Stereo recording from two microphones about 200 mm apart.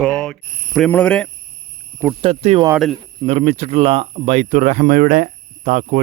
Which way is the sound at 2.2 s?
30° right (ahead or behind).